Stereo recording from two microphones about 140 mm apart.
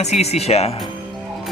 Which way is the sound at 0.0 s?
50° left (ahead or behind).